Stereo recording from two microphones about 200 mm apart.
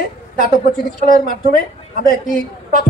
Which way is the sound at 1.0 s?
45° left (ahead or behind).